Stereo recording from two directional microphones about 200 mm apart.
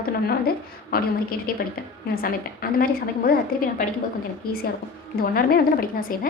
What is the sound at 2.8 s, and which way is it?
A woman's voice, 45° left (ahead or behind).